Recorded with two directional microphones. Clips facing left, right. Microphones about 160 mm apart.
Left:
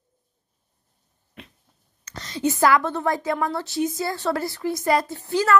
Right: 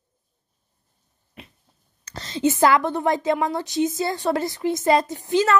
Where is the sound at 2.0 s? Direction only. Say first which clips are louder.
Right 3 dB; 30° right (ahead or behind).